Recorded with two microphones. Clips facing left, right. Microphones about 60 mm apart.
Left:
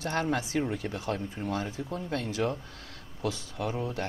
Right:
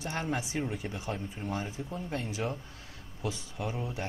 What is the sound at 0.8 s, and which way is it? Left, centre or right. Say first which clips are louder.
Speech: left 4 dB; centre.